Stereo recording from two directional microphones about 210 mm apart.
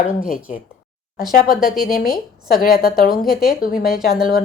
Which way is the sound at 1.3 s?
45° left (ahead or behind).